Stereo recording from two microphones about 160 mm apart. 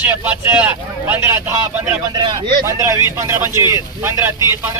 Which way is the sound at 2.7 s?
20° right (ahead or behind).